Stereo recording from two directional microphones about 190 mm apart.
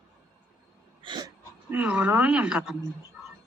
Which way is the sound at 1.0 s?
25° right (ahead or behind).